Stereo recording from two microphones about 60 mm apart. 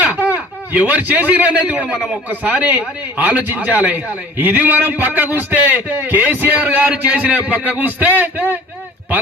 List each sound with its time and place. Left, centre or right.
0.0 s a man's voice: right